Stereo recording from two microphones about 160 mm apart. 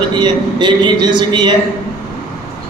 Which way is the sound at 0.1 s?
30° right (ahead or behind).